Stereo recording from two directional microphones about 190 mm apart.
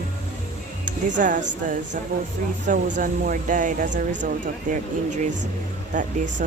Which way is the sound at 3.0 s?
45° right (ahead or behind).